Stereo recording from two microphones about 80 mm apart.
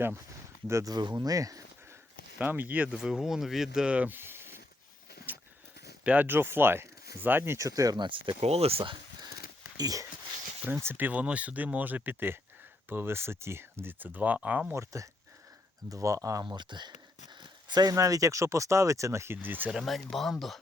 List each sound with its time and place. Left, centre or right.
0.9 s speech: right
2.4 s speech: right
2.9 s speech: centre
4.2 s a sound: right
6.1 s speech: right
7.7 s speech: right
7.9 s speech: right
8.8 s a sound: right
9.7 s speech: right
10.8 s speech: right
14.7 s speech: right
17.9 s speech: right
19.8 s speech: centre